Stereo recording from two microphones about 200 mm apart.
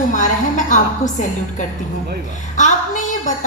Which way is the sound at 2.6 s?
40° left (ahead or behind).